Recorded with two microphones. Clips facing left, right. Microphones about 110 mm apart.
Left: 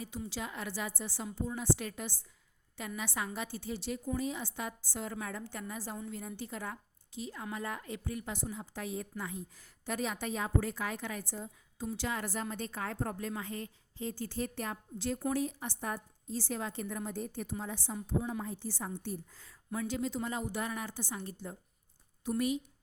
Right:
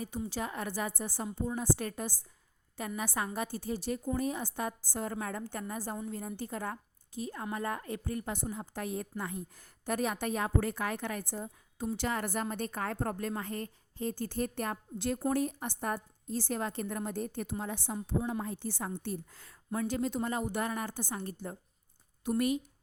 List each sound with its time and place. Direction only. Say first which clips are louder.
0.3 s a woman's voice: right 3 dB; 45° right (ahead or behind); by 19.8 s 65° right (ahead or behind)
19.9 s a woman's voice: right 3 dB; 50° right (ahead or behind)